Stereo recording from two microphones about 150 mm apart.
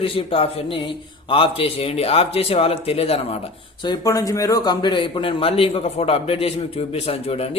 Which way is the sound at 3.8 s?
25° left (ahead or behind).